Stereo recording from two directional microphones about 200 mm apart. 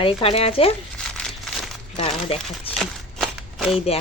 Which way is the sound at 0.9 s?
5° left (ahead or behind).